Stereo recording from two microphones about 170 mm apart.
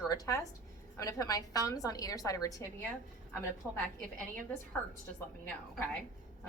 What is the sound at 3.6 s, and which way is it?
Speech, 10° left (ahead or behind).